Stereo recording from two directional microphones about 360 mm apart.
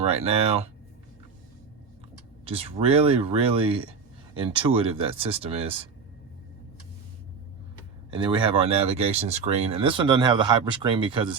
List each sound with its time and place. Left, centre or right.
0.0 s speech: centre
2.4 s speech: centre
8.1 s speech: centre